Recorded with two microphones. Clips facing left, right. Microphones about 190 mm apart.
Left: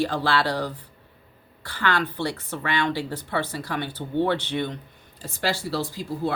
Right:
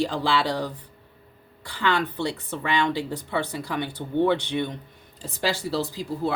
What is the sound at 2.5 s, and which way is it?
Speech, 15° right (ahead or behind).